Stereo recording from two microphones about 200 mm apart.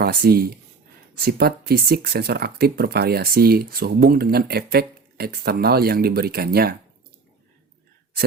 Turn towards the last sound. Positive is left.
turn(degrees=-50)  # may be behind; listen again after turning